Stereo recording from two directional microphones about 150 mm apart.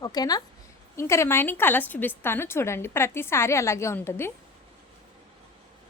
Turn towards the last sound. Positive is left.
turn(degrees=15)  # may be behind; listen again after turning